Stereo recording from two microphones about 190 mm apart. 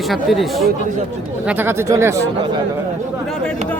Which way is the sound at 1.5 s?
10° right (ahead or behind).